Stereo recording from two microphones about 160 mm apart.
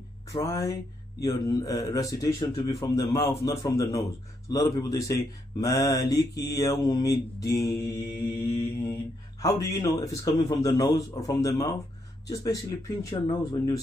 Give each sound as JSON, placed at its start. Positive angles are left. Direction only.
{"t": 0.3, "sound": "mantra", "side_deg": 20}